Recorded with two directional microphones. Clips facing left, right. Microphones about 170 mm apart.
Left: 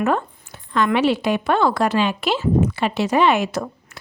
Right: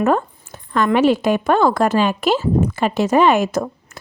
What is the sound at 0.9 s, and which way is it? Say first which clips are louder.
Speech: right 6 dB; 45° right (ahead or behind).